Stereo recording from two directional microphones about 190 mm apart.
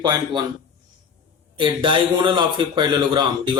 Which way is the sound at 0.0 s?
20° right (ahead or behind).